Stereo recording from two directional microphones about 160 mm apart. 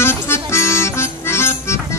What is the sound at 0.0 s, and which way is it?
Music, 15° left (ahead or behind).